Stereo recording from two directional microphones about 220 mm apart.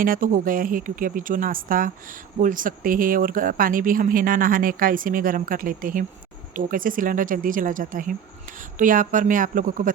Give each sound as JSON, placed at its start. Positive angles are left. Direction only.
{"t": 0.0, "sound": "speech", "side_deg": -40}